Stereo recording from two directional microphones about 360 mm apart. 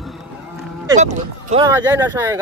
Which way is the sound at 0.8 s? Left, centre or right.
Centre.